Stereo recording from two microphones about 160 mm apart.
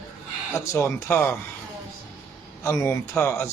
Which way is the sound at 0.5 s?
15° left (ahead or behind).